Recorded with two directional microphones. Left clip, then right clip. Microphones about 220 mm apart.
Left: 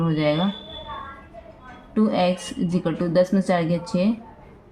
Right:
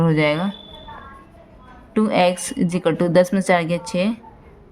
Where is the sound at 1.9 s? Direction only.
40° right (ahead or behind).